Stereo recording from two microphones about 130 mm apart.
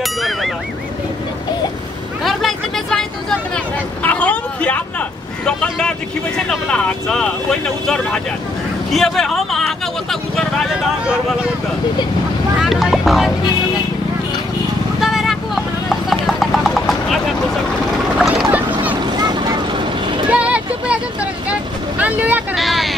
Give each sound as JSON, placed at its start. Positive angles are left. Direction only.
{"t": 0.0, "sound": "a sound", "side_deg": 0}
{"t": 2.2, "sound": "vehicle", "side_deg": 0}
{"t": 5.4, "sound": "speech", "side_deg": 5}
{"t": 7.8, "sound": "vehicle", "side_deg": 5}
{"t": 8.9, "sound": "speech", "side_deg": 0}
{"t": 12.6, "sound": "speech", "side_deg": 0}
{"t": 15.0, "sound": "clip-clop", "side_deg": 0}
{"t": 18.1, "sound": "boat", "side_deg": 0}
{"t": 19.1, "sound": "vehicle", "side_deg": -30}
{"t": 20.2, "sound": "vehicle", "side_deg": -10}
{"t": 22.6, "sound": "a sound", "side_deg": 0}